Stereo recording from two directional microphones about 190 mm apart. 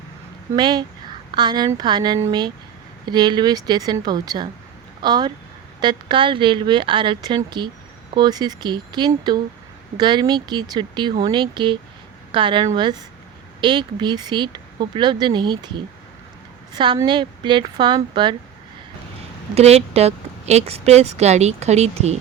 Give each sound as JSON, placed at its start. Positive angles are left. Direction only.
{"t": 0.5, "sound": "speech", "side_deg": -20}
{"t": 16.7, "sound": "speech", "side_deg": -25}
{"t": 19.5, "sound": "a woman's voice", "side_deg": -35}